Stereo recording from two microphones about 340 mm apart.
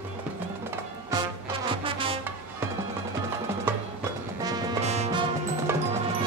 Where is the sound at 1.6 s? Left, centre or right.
Centre.